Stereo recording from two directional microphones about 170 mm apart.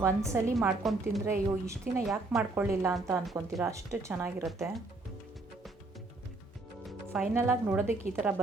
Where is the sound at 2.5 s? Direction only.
15° right (ahead or behind).